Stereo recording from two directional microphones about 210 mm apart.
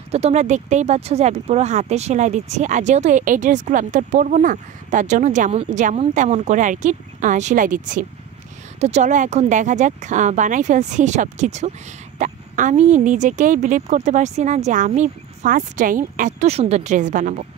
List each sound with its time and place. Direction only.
0.1 s speech: 30° right (ahead or behind)